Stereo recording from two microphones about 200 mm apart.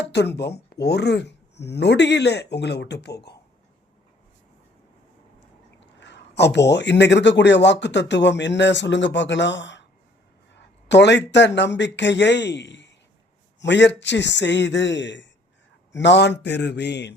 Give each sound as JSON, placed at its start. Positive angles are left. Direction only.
{"t": 0.1, "sound": "speech", "side_deg": 55}
{"t": 6.0, "sound": "speech", "side_deg": 60}